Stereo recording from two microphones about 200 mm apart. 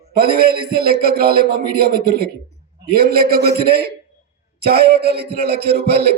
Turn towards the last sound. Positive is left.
turn(degrees=-55)  # may be behind; listen again after turning